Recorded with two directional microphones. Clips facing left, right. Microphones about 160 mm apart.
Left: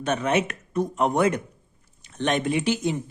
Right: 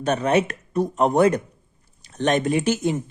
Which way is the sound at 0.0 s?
35° right (ahead or behind).